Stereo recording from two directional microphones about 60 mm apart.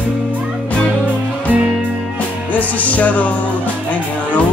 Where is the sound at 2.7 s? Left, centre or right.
Left.